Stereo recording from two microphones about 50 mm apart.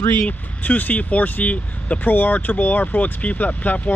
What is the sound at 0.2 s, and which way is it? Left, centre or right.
Speech, left.